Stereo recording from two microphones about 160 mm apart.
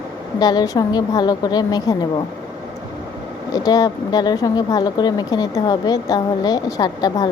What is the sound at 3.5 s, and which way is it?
Speech, 25° left (ahead or behind).